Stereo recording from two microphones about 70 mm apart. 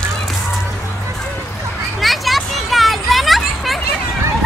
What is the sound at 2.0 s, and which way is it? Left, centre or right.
Children playing, centre.